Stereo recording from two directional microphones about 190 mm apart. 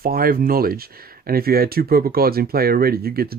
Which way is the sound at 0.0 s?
50° right (ahead or behind).